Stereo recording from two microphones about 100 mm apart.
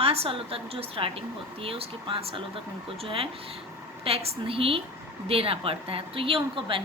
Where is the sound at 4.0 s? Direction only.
80° right.